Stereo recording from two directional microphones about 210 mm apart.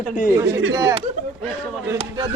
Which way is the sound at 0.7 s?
15° right (ahead or behind).